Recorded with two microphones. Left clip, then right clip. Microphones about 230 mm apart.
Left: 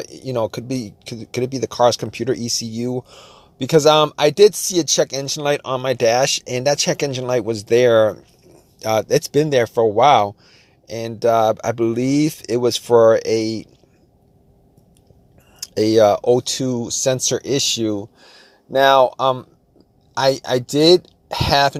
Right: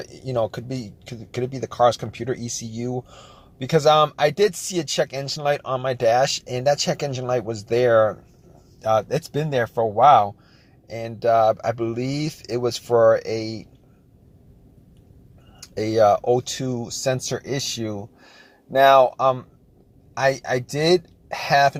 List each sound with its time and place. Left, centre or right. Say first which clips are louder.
0.1 s speech: left 1 dB; left
15.6 s speech: left 4 dB; left